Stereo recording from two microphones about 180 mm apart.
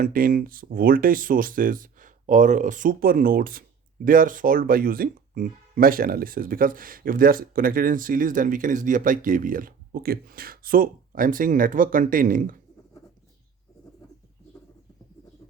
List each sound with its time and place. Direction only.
0.0 s speech: 50° right (ahead or behind)